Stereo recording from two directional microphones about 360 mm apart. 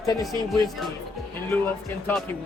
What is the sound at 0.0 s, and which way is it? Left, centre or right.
Speech, centre.